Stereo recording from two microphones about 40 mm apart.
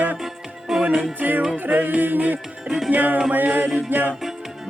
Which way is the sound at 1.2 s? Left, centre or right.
Right.